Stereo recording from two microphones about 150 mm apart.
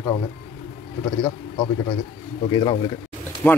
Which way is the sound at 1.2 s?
25° left (ahead or behind).